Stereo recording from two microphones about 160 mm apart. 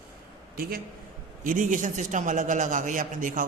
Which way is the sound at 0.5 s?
70° right (ahead or behind).